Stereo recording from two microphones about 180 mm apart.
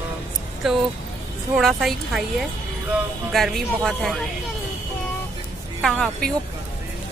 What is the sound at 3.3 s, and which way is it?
Speech, centre (ahead or behind).